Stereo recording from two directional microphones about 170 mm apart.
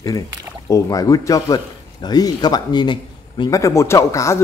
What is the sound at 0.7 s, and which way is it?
A man's voice, 20° left (ahead or behind).